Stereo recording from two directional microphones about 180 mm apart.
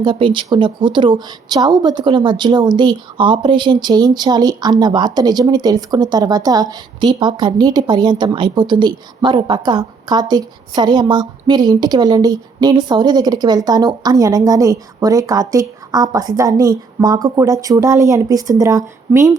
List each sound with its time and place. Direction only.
0.0 s speech: 25° right (ahead or behind)